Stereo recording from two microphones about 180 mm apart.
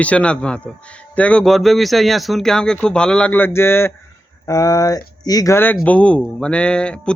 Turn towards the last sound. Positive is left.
turn(degrees=5)  # may be behind; listen again after turning